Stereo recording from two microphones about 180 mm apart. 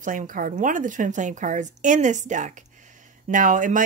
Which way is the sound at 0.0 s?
45° right (ahead or behind).